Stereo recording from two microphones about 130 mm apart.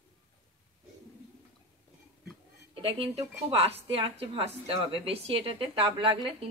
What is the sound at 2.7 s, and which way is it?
Speech, 50° right (ahead or behind).